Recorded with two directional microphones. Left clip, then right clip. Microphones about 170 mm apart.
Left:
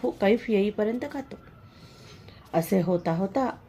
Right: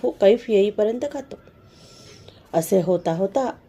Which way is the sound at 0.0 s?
30° right (ahead or behind).